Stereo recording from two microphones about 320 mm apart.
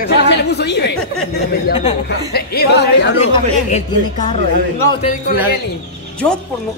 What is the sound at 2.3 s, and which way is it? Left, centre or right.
Speech, left.